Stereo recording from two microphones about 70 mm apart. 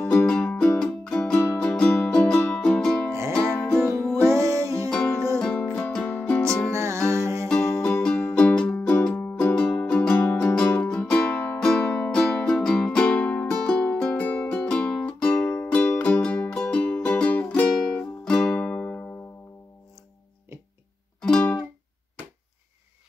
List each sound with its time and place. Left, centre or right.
0.2 s music: centre
3.1 s music: right
3.3 s music: centre
4.0 s music: left
4.3 s music: right
5.4 s music: centre
6.7 s music: right
7.4 s music: centre
15.4 s music: left
21.2 s music: centre